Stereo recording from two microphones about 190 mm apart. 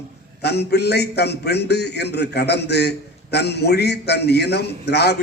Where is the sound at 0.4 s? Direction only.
60° left (ahead or behind).